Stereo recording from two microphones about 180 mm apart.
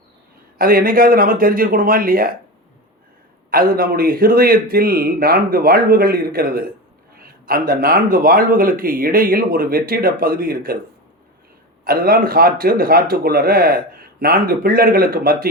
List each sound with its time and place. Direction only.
0.6 s speech: 55° right (ahead or behind)
3.5 s a man's voice: 55° right (ahead or behind)
7.2 s a sound: 55° right (ahead or behind)
7.7 s speech: 55° right (ahead or behind)
11.9 s a man's voice: 55° right (ahead or behind)